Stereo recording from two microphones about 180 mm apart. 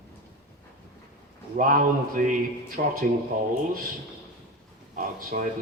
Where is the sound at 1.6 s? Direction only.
50° right (ahead or behind).